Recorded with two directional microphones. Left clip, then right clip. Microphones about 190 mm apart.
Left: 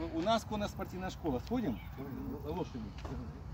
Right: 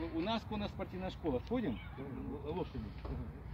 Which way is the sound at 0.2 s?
25° left (ahead or behind).